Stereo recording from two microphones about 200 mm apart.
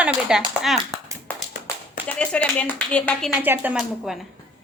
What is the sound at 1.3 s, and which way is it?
Tap, 10° left (ahead or behind).